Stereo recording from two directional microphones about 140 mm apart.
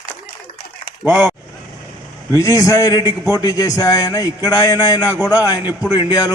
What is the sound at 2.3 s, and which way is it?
A man's voice, 25° left (ahead or behind).